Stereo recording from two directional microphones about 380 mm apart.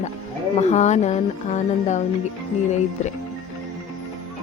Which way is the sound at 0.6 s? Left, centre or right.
Centre.